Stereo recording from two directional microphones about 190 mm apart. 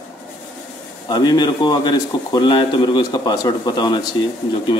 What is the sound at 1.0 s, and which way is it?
A man's voice, 20° left (ahead or behind).